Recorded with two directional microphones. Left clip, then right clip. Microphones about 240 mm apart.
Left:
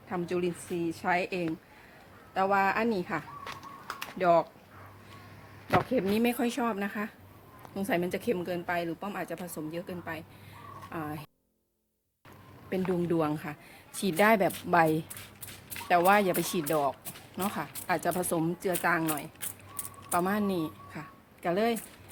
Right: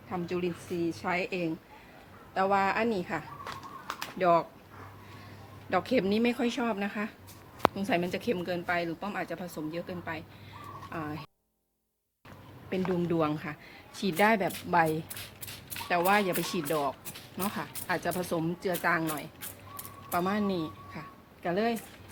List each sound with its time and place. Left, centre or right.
0.1 s speech: left
6.1 s a woman's voice: left
13.1 s speech: left